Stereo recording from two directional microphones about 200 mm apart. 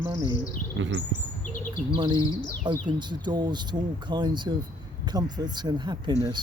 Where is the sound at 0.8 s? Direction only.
70° right (ahead or behind).